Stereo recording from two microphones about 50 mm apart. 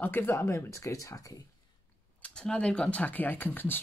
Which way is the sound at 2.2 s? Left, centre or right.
Centre.